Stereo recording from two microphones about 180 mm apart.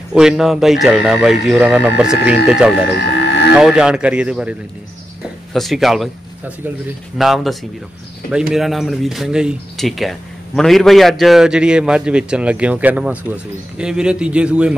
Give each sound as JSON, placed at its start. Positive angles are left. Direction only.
{"t": 0.1, "sound": "speech", "side_deg": -5}
{"t": 3.2, "sound": "a sound", "side_deg": 70}
{"t": 3.5, "sound": "speech", "side_deg": -5}
{"t": 7.2, "sound": "speech", "side_deg": 0}